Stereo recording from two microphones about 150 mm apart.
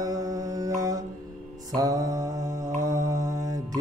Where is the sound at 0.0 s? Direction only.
25° right (ahead or behind).